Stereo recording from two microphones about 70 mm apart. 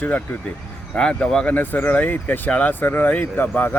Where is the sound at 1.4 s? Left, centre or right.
Left.